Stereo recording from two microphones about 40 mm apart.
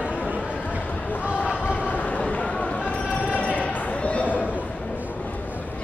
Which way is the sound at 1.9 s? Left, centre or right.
Left.